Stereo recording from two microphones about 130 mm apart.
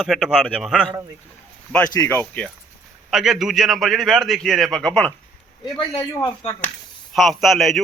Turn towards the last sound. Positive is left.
turn(degrees=0)  # may be behind; listen again after turning